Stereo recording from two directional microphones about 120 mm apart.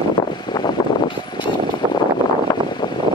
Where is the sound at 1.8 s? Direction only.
35° right (ahead or behind).